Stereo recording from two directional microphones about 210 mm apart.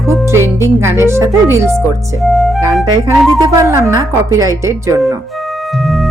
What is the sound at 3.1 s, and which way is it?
Speech, centre (ahead or behind).